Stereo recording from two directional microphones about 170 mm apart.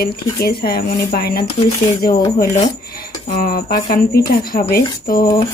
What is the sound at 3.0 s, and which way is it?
Speech, 55° left (ahead or behind).